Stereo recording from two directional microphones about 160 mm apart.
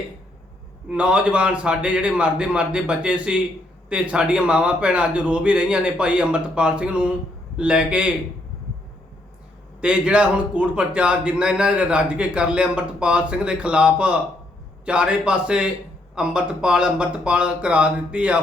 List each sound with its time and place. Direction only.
0.9 s a man's voice: 5° right (ahead or behind)
9.8 s a man's voice: 5° right (ahead or behind)